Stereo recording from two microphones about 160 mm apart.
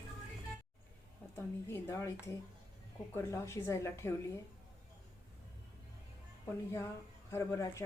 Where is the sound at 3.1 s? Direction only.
15° left (ahead or behind).